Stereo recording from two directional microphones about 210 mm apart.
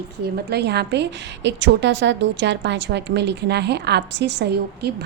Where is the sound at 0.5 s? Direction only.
50° right (ahead or behind).